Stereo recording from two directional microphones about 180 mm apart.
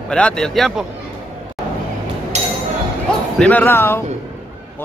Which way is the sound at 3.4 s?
10° left (ahead or behind).